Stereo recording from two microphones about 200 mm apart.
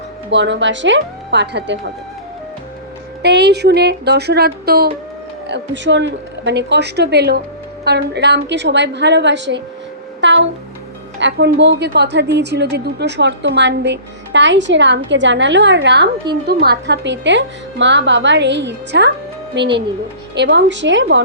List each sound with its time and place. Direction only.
0.3 s a woman's voice: 60° right (ahead or behind)
3.2 s a woman's voice: 55° right (ahead or behind)
5.5 s a woman's voice: 65° right (ahead or behind)
10.2 s music: 65° right (ahead or behind)
11.2 s a woman's voice: 60° right (ahead or behind)